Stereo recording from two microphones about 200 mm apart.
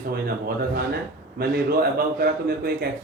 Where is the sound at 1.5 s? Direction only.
50° right (ahead or behind).